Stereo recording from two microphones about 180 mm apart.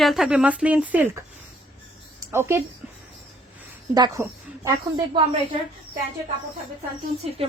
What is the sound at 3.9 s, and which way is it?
Speech, 20° right (ahead or behind).